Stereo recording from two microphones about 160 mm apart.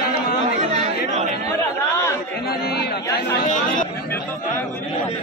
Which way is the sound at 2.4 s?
80° left.